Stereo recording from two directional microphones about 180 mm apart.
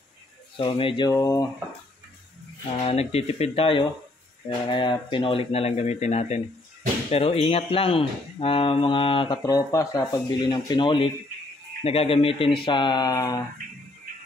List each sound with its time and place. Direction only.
0.6 s speech: 30° left (ahead or behind)
2.8 s speech: 35° left (ahead or behind)
9.4 s speech: 20° left (ahead or behind)